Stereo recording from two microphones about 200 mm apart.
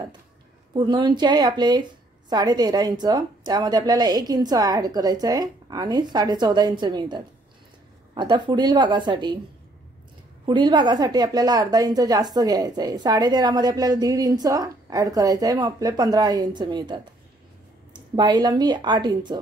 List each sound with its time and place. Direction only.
0.7 s a woman's voice: 20° right (ahead or behind)
10.4 s a woman's voice: 20° right (ahead or behind)